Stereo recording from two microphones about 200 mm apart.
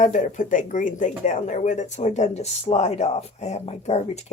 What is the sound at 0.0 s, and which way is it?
Speech, 40° left (ahead or behind).